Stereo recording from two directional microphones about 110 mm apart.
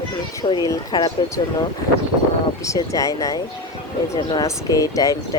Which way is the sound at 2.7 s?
30° left (ahead or behind).